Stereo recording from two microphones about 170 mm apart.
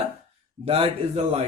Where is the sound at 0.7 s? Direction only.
35° right (ahead or behind).